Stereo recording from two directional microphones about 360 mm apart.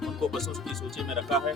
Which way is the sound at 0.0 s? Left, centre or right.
Centre.